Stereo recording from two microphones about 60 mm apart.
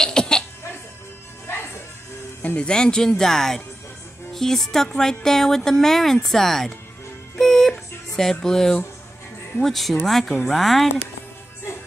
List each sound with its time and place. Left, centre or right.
0.0 s cough: centre
1.5 s music: left
2.4 s a woman's voice: centre
7.3 s music: centre
8.2 s speech: centre